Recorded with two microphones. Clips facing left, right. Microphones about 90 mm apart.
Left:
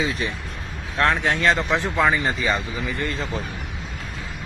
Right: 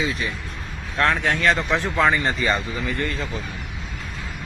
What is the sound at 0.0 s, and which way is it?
Speech, 30° left (ahead or behind).